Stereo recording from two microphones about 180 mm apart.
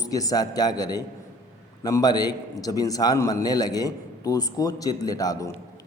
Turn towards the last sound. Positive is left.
turn(degrees=20)  # may be behind; listen again after turning